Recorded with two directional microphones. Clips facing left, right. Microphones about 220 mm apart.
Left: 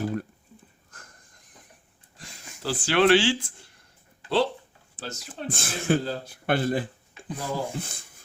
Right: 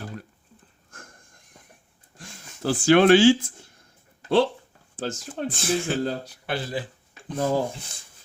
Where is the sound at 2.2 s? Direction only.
50° right (ahead or behind).